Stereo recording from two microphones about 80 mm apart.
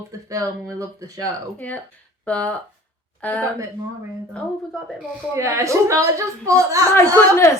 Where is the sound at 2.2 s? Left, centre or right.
Centre.